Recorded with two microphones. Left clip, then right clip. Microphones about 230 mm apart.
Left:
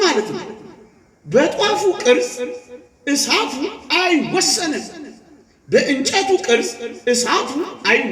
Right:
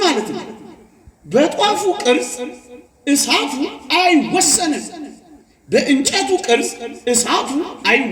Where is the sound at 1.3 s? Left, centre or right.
Right.